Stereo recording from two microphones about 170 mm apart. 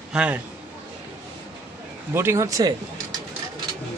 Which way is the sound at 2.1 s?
15° right (ahead or behind).